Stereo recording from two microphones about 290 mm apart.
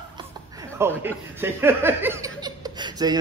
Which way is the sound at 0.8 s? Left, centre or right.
Centre.